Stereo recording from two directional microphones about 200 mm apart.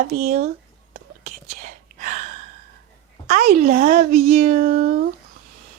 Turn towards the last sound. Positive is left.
turn(degrees=-45)  # may be behind; listen again after turning